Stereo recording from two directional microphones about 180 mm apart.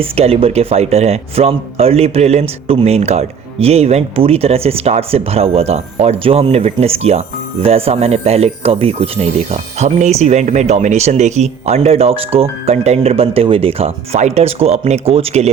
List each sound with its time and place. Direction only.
0.0 s speech: 35° right (ahead or behind)